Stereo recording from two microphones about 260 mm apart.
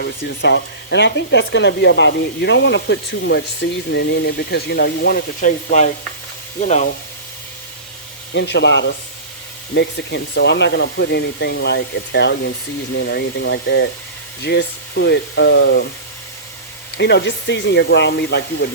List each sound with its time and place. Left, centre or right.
0.0 s speech: left
8.3 s speech: left
17.0 s speech: left